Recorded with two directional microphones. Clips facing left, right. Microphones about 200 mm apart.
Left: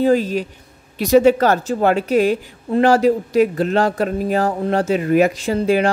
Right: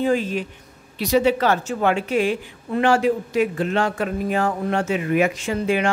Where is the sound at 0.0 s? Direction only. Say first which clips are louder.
Left 5 dB; 40° left (ahead or behind).